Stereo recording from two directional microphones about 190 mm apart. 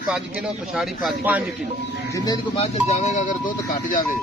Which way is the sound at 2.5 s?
35° left (ahead or behind).